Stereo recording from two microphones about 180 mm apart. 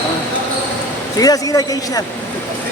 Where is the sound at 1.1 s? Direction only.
20° left (ahead or behind).